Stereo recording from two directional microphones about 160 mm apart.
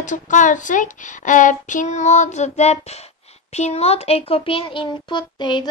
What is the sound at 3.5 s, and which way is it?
A woman's voice, 45° left (ahead or behind).